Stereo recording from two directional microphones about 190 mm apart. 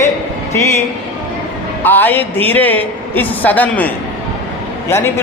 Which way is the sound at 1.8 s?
10° left (ahead or behind).